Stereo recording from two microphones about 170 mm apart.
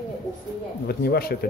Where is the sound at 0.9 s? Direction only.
65° left (ahead or behind).